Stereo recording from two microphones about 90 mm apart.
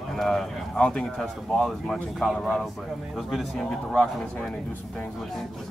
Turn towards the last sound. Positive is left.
turn(degrees=5)  # may be behind; listen again after turning